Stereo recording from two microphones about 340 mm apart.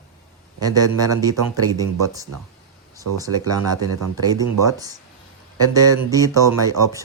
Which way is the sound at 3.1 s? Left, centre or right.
Centre.